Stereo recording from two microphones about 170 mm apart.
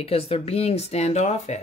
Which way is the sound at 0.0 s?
35° left (ahead or behind).